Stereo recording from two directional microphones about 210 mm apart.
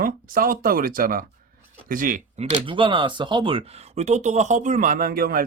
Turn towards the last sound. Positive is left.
turn(degrees=-45)  # may be behind; listen again after turning